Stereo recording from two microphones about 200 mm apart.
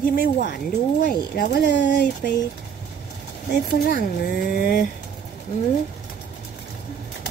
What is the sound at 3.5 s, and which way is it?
Speech, 50° left (ahead or behind).